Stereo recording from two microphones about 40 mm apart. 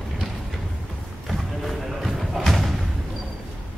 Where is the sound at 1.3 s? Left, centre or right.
Centre.